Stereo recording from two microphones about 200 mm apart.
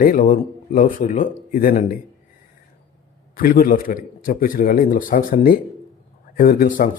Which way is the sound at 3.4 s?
45° left (ahead or behind).